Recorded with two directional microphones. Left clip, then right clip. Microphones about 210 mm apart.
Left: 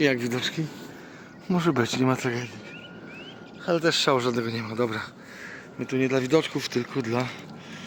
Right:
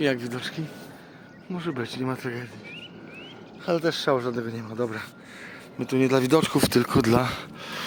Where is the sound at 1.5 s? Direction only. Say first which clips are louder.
Left 7 dB; 45° left (ahead or behind); by 2.5 s 30° left (ahead or behind).